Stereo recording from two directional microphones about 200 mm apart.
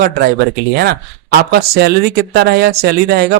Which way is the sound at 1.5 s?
55° right (ahead or behind).